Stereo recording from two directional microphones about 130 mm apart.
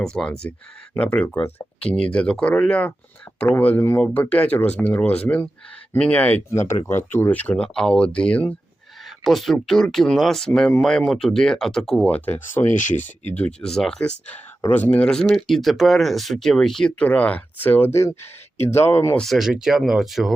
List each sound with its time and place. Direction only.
0.0 s speech: 5° left (ahead or behind)
12.6 s speech: 70° left (ahead or behind)
13.2 s speech: 10° left (ahead or behind)
19.1 s speech: centre (ahead or behind)